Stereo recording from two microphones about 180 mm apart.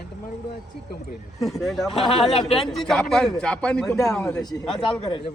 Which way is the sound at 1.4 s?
Centre (ahead or behind).